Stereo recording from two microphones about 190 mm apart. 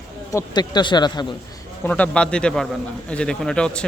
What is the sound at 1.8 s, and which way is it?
Speech, 10° left (ahead or behind).